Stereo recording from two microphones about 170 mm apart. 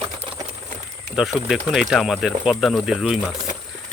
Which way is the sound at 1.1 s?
Centre (ahead or behind).